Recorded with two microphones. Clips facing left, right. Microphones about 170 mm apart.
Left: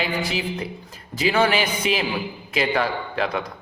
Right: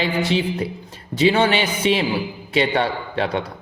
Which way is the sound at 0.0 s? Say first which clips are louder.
Right 5 dB; 25° right (ahead or behind).